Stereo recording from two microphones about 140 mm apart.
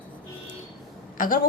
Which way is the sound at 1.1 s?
80° left.